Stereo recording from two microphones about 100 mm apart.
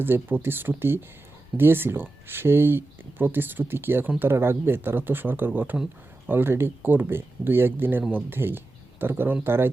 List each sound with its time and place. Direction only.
0.0 s speech: 20° right (ahead or behind)